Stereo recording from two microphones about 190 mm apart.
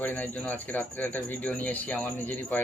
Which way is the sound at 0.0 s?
10° left (ahead or behind).